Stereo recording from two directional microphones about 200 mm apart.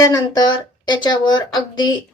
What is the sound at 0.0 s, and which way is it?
A woman's voice, 20° left (ahead or behind).